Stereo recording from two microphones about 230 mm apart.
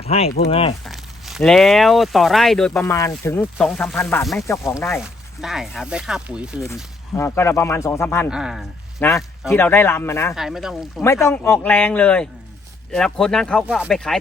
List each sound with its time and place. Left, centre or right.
0.0 s speech: left
0.9 s speech: centre
3.9 s speech: centre
4.9 s speech: centre
7.2 s speech: centre
8.3 s speech: centre
9.0 s speech: centre
10.3 s speech: centre
11.0 s speech: centre